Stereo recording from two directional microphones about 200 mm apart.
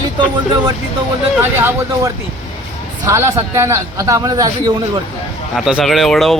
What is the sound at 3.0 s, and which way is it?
A man's voice, 15° right (ahead or behind).